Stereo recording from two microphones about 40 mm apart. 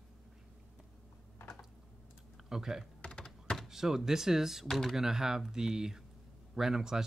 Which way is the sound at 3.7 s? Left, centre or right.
Centre.